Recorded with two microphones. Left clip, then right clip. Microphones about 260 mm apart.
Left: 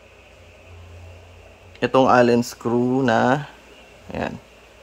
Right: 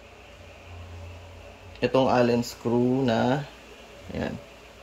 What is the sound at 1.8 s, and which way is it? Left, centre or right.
Speech, centre.